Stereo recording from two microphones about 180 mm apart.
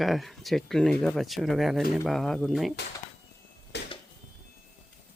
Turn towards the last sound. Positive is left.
turn(degrees=70)  # may be behind; listen again after turning